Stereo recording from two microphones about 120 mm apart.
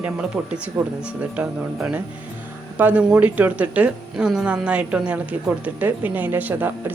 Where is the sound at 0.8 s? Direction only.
25° right (ahead or behind).